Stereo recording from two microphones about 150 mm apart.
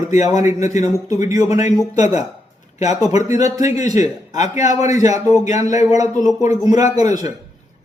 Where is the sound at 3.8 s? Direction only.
55° left (ahead or behind).